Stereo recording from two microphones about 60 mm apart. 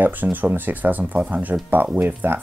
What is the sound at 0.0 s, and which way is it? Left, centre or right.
Speech, right.